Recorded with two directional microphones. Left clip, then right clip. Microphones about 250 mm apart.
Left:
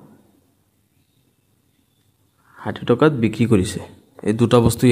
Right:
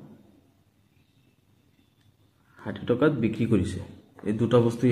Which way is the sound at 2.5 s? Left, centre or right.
Left.